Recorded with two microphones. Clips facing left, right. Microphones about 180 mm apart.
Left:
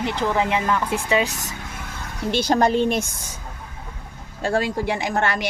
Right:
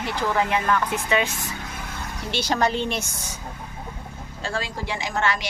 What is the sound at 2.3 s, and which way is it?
Speech, 50° left (ahead or behind).